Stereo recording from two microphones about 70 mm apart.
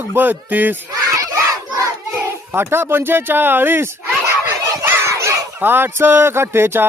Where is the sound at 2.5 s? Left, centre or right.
Right.